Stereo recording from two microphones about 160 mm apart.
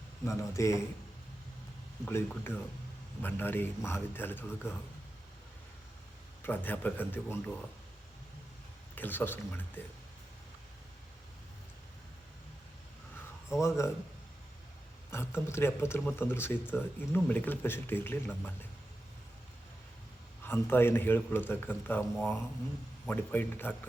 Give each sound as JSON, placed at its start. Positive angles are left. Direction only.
{"t": 0.3, "sound": "a man's voice", "side_deg": 20}
{"t": 2.0, "sound": "a man's voice", "side_deg": 10}
{"t": 6.4, "sound": "a man's voice", "side_deg": 10}
{"t": 9.0, "sound": "a man's voice", "side_deg": 10}
{"t": 13.5, "sound": "a man's voice", "side_deg": 20}
{"t": 15.1, "sound": "a man's voice", "side_deg": 15}
{"t": 20.4, "sound": "a man's voice", "side_deg": 15}